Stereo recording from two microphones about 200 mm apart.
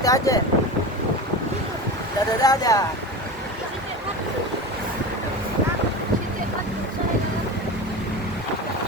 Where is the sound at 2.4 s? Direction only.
20° left (ahead or behind).